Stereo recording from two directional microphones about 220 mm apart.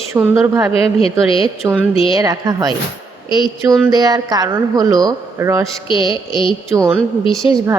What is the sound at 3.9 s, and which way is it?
Speech, 15° right (ahead or behind).